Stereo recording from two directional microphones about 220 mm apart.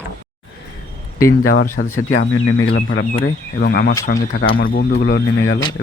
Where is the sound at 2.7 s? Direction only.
40° left (ahead or behind).